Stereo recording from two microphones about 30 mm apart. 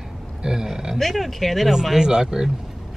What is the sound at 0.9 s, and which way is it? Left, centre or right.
Speech, centre.